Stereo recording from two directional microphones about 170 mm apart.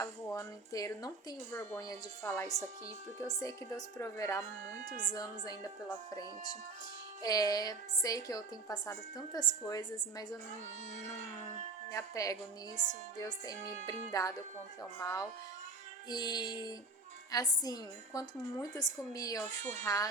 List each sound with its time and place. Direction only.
0.0 s a woman's voice: 20° left (ahead or behind)
7.2 s a woman's voice: 20° left (ahead or behind)
11.9 s a woman's voice: 20° left (ahead or behind)